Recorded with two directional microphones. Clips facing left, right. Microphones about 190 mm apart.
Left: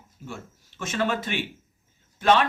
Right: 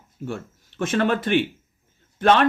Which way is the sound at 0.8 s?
55° right (ahead or behind).